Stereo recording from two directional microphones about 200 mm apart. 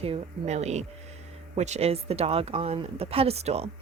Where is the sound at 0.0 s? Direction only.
30° right (ahead or behind).